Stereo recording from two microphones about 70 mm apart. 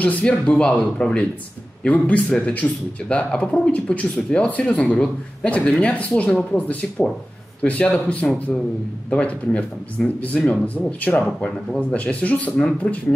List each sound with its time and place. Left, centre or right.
0.0 s speech: centre